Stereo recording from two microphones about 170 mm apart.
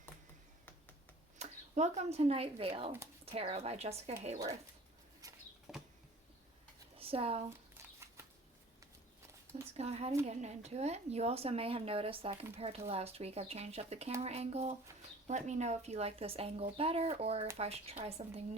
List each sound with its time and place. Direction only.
1.4 s speech: 40° right (ahead or behind)
5.2 s bird flight: 20° right (ahead or behind)
5.7 s bird flight: centre (ahead or behind)
6.9 s speech: 35° right (ahead or behind)
7.9 s bird flight: 15° right (ahead or behind)
9.7 s speech: 40° right (ahead or behind)